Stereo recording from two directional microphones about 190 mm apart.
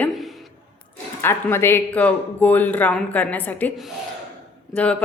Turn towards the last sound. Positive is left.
turn(degrees=5)  # may be behind; listen again after turning